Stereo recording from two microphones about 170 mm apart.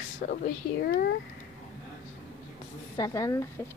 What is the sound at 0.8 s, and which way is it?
Speech, 75° left (ahead or behind).